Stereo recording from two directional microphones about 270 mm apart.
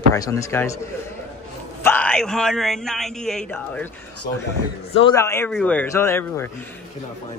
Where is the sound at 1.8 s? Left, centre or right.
Centre.